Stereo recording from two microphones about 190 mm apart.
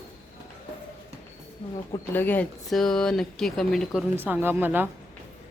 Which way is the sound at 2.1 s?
10° left (ahead or behind).